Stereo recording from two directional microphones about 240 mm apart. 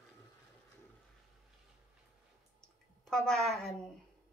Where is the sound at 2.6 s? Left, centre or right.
Centre.